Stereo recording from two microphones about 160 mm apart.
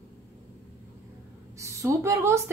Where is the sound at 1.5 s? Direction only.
20° right (ahead or behind).